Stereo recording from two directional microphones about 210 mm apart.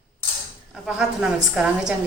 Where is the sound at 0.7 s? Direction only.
5° right (ahead or behind).